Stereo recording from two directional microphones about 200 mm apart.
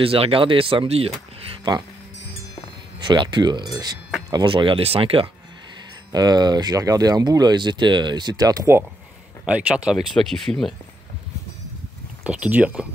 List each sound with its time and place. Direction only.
0.0 s speech: 30° right (ahead or behind)
3.0 s speech: 20° right (ahead or behind); by 10.7 s centre (ahead or behind)
12.2 s speech: 5° right (ahead or behind)